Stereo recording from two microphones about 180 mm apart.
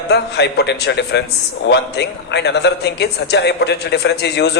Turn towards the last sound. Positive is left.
turn(degrees=70)  # may be behind; listen again after turning